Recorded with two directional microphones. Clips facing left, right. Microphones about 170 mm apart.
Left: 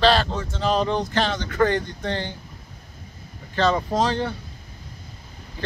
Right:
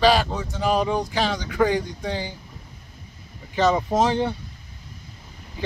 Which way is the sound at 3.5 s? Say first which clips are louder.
Right 1 dB; 15° right (ahead or behind).